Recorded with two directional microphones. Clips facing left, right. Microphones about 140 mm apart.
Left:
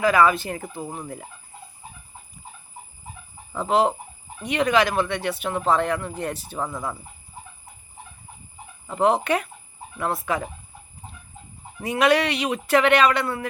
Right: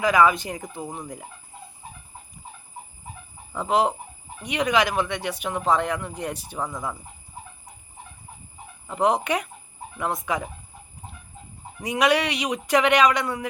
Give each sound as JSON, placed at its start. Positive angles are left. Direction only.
{"t": 0.0, "sound": "speech", "side_deg": -15}
{"t": 3.5, "sound": "speech", "side_deg": -15}
{"t": 8.9, "sound": "speech", "side_deg": -15}
{"t": 11.8, "sound": "speech", "side_deg": -15}